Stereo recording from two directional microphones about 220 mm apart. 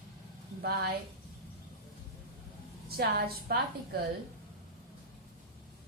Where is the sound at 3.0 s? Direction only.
45° right (ahead or behind).